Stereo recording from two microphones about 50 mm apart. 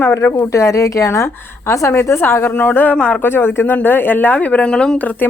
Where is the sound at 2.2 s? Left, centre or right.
Left.